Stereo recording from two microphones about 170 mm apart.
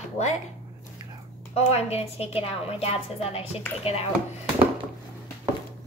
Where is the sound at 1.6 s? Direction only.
40° left (ahead or behind).